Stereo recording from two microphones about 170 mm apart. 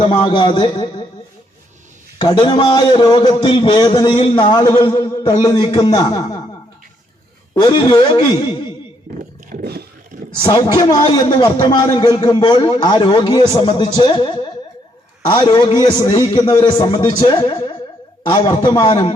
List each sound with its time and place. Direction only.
0.0 s a man's voice: 25° left (ahead or behind)
2.2 s a man's voice: 30° left (ahead or behind)
7.5 s a man's voice: 25° left (ahead or behind)
9.5 s roaring cats: 60° right (ahead or behind)
10.4 s a man's voice: 20° left (ahead or behind)